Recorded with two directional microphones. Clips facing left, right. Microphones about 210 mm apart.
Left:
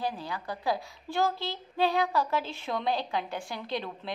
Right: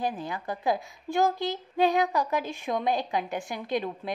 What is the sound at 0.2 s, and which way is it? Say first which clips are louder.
A woman's voice: right 3 dB; 20° right (ahead or behind).